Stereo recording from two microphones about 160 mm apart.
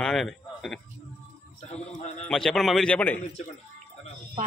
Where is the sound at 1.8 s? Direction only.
45° left (ahead or behind).